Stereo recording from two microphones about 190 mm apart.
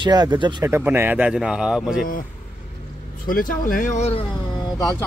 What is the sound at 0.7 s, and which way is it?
Speech, 10° right (ahead or behind).